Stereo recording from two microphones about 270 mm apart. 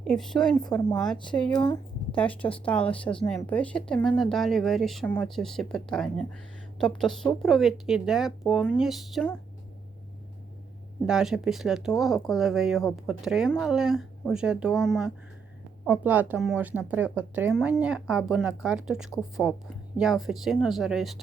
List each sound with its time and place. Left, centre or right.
0.0 s speech: centre
1.5 s speech: centre
2.1 s speech: centre
11.0 s speech: centre